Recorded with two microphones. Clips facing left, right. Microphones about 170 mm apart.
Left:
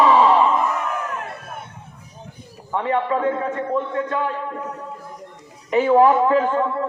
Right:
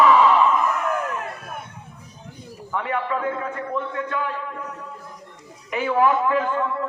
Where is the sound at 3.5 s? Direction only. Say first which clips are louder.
Left 5 dB; 30° left (ahead or behind).